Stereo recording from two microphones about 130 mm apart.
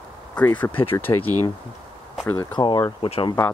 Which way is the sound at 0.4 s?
10° left (ahead or behind).